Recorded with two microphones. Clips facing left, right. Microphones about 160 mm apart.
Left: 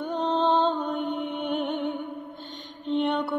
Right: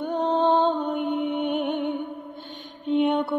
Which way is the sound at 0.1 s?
10° right (ahead or behind).